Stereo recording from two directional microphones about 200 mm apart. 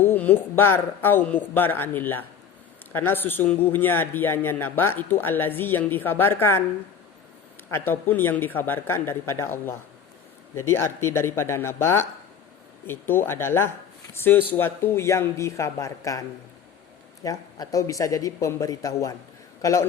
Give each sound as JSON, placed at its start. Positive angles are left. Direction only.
{"t": 0.0, "sound": "a man's voice", "side_deg": 10}
{"t": 7.7, "sound": "a man's voice", "side_deg": 10}
{"t": 17.2, "sound": "a man's voice", "side_deg": 20}